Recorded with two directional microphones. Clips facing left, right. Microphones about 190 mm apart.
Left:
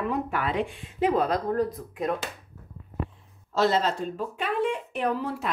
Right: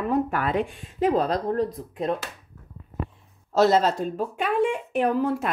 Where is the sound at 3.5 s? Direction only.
40° right (ahead or behind).